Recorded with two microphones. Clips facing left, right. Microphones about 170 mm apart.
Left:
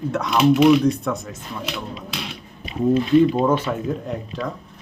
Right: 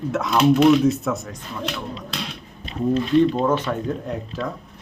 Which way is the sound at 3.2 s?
10° left (ahead or behind).